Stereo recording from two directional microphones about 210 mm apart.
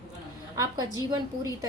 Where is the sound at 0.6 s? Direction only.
15° right (ahead or behind).